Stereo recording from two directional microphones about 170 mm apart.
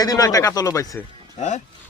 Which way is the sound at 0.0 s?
20° left (ahead or behind).